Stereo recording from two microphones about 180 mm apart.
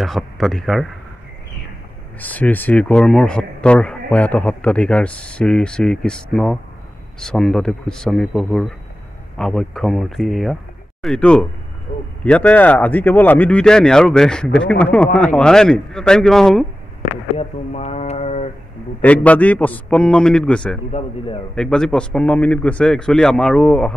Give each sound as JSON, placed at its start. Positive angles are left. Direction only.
{"t": 0.0, "sound": "speech", "side_deg": 0}
{"t": 2.1, "sound": "speech", "side_deg": 10}
{"t": 17.4, "sound": "a sound", "side_deg": 35}
{"t": 18.9, "sound": "speech", "side_deg": 10}